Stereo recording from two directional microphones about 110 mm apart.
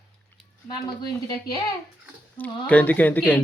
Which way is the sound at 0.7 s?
40° left (ahead or behind).